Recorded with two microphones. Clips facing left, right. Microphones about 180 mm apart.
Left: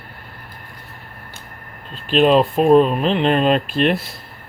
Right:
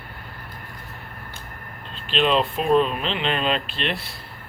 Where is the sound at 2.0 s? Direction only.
45° left (ahead or behind).